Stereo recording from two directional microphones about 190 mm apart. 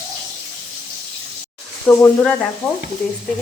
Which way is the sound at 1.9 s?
5° left (ahead or behind).